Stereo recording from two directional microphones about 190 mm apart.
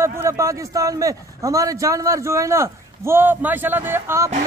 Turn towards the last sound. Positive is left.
turn(degrees=-15)  # may be behind; listen again after turning